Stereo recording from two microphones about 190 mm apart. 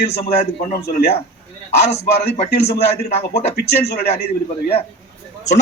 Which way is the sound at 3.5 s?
60° left (ahead or behind).